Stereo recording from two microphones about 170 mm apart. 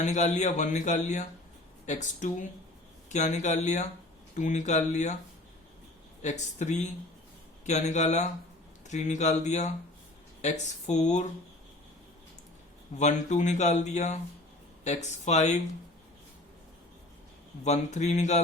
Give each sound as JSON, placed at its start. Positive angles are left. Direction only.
{"t": 0.0, "sound": "speech", "side_deg": 45}
{"t": 6.2, "sound": "speech", "side_deg": 45}
{"t": 13.0, "sound": "speech", "side_deg": 45}
{"t": 17.6, "sound": "speech", "side_deg": 45}